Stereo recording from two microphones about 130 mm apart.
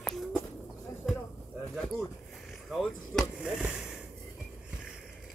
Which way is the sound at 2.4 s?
Centre (ahead or behind).